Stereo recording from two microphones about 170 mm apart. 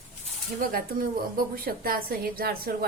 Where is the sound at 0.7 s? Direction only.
60° right (ahead or behind).